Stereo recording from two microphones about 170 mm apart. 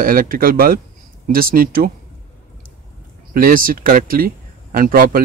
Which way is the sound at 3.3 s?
55° right (ahead or behind).